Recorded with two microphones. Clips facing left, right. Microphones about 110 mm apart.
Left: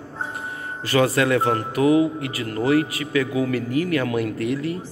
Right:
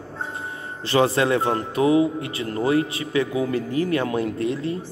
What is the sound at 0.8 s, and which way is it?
Speech, 25° right (ahead or behind).